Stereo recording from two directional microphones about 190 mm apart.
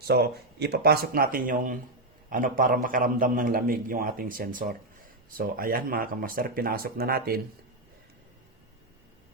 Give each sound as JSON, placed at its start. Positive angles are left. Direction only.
{"t": 0.1, "sound": "a man's voice", "side_deg": -60}